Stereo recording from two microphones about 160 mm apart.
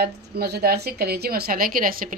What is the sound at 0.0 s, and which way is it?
A woman's voice, 80° right.